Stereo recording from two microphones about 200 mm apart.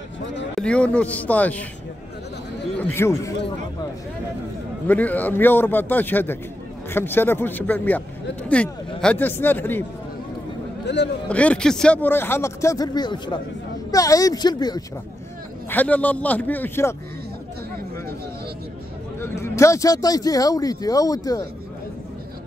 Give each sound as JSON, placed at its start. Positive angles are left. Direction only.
{"t": 0.6, "sound": "a man's voice", "side_deg": 5}
{"t": 2.9, "sound": "a man's voice", "side_deg": 15}
{"t": 4.8, "sound": "a man's voice", "side_deg": 10}
{"t": 10.9, "sound": "a man's voice", "side_deg": 60}
{"t": 11.2, "sound": "a man's voice", "side_deg": 5}
{"t": 15.7, "sound": "a man's voice", "side_deg": 10}
{"t": 19.1, "sound": "a man's voice", "side_deg": 10}